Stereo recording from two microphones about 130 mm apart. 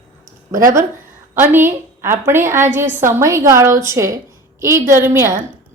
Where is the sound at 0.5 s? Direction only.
25° right (ahead or behind).